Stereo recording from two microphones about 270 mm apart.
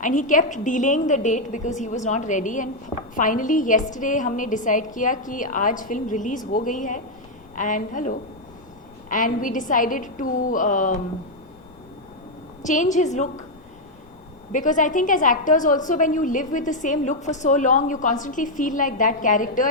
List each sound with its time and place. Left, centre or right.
0.0 s a woman's voice: left
12.6 s a woman's voice: left
14.5 s a woman's voice: left